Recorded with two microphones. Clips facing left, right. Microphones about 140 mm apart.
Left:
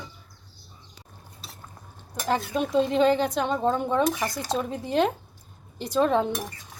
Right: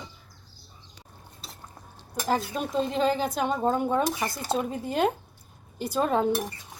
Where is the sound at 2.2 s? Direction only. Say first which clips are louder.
Left 2 dB; 5° right (ahead or behind).